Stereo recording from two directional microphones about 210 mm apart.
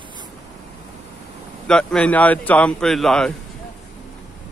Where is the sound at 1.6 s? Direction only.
5° left (ahead or behind).